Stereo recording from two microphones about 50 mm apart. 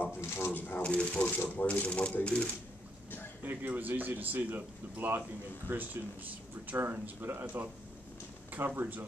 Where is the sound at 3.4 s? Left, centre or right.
Right.